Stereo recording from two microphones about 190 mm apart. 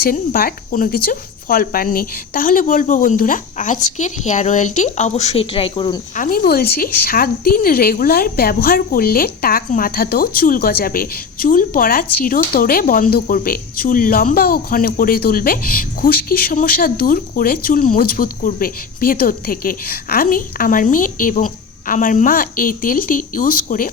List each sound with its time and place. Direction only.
0.0 s speech: 50° left (ahead or behind); by 6.0 s 25° left (ahead or behind)
6.1 s a woman's voice: 45° left (ahead or behind)